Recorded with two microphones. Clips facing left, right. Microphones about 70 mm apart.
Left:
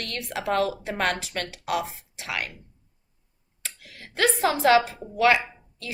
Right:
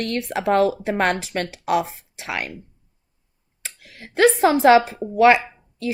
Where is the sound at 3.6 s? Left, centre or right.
Right.